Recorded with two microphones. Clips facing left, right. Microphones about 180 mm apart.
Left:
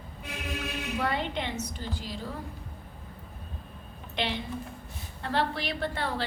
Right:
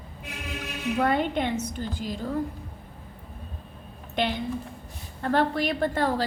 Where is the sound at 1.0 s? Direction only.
50° right (ahead or behind).